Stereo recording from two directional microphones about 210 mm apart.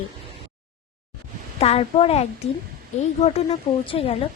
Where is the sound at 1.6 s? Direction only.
30° left (ahead or behind).